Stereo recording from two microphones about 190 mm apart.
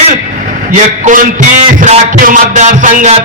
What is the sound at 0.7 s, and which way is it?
A man's voice, 40° right (ahead or behind).